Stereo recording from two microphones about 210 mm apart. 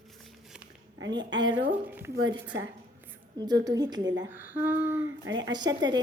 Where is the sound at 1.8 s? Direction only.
10° right (ahead or behind).